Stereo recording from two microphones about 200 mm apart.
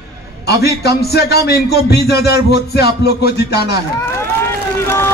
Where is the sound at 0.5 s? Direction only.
55° left (ahead or behind).